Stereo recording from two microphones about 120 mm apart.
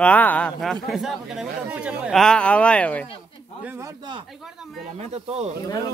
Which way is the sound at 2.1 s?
5° left (ahead or behind).